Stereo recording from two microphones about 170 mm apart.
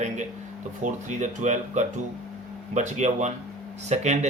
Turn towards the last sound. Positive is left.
turn(degrees=-40)  # may be behind; listen again after turning